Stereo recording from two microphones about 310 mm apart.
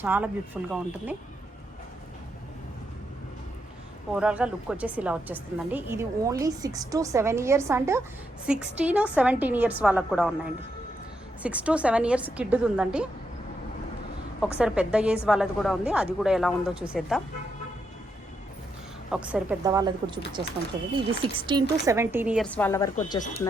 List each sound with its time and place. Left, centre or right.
0.0 s a woman's voice: centre
4.1 s a woman's voice: centre
11.4 s a woman's voice: centre
14.4 s a woman's voice: centre
19.1 s a woman's voice: centre